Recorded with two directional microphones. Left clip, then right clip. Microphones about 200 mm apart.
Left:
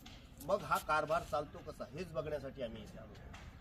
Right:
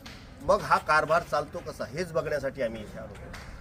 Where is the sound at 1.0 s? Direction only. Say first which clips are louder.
Right 11 dB; 25° right (ahead or behind).